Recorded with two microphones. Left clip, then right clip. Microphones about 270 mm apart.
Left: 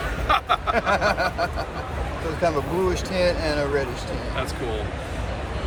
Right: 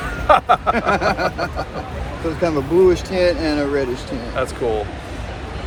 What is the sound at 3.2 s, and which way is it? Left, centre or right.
Speech, right.